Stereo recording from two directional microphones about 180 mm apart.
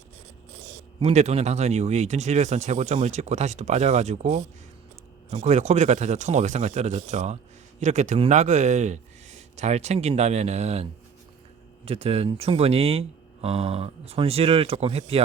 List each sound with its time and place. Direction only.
0.9 s speech: 35° right (ahead or behind)
11.9 s speech: 35° right (ahead or behind)